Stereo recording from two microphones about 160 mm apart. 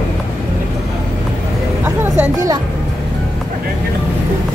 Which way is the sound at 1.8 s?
20° right (ahead or behind).